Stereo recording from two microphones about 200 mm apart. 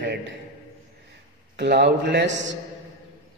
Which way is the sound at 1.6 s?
55° right (ahead or behind).